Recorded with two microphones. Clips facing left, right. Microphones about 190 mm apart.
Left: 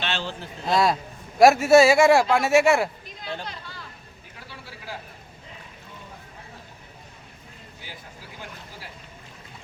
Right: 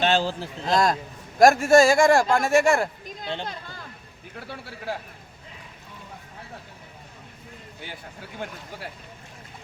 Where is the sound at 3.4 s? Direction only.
50° right (ahead or behind).